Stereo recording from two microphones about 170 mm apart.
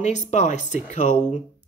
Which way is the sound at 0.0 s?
45° left (ahead or behind).